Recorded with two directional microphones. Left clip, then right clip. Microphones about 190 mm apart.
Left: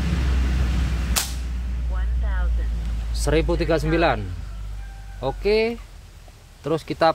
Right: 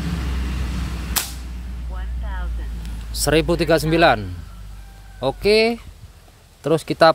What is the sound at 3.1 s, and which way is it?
Speech, 40° right (ahead or behind).